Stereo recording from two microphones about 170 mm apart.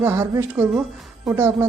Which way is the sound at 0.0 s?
15° right (ahead or behind).